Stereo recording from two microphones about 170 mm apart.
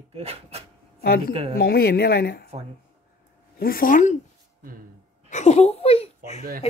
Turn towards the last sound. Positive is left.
turn(degrees=35)  # may be behind; listen again after turning